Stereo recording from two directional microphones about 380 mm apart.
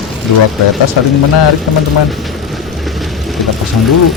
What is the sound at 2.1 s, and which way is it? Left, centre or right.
Vehicle, centre.